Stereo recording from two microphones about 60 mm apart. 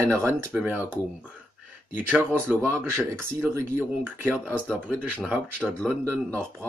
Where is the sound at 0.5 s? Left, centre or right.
Right.